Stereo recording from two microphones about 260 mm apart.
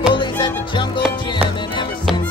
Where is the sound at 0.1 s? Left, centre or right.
Centre.